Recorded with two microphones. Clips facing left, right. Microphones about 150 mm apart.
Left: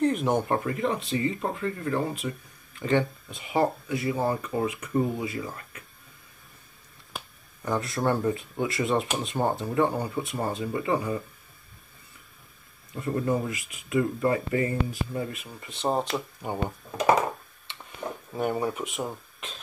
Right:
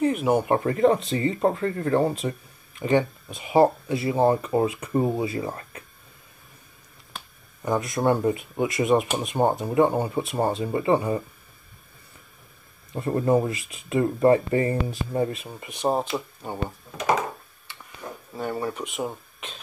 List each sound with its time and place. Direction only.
0.0 s speech: 5° right (ahead or behind)
0.7 s speech: 40° right (ahead or behind)
2.8 s speech: 15° right (ahead or behind); by 5.9 s 30° right (ahead or behind)
7.6 s speech: 15° right (ahead or behind); by 11.2 s 30° right (ahead or behind)
12.9 s speech: 35° right (ahead or behind)
15.6 s speech: 15° right (ahead or behind)
16.4 s speech: 10° left (ahead or behind)
18.3 s speech: 15° left (ahead or behind)
18.8 s speech: centre (ahead or behind)